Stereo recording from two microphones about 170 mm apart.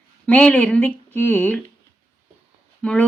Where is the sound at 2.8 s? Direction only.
5° left (ahead or behind).